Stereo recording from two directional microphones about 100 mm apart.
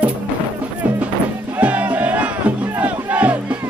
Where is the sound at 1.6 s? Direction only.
15° right (ahead or behind).